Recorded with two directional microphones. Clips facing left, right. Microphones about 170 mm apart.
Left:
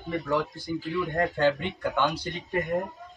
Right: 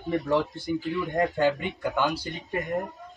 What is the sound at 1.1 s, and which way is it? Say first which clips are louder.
Speech: right 1 dB; 10° right (ahead or behind).